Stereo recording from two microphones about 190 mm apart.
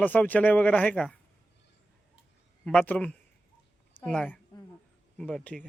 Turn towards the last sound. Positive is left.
turn(degrees=5)  # may be behind; listen again after turning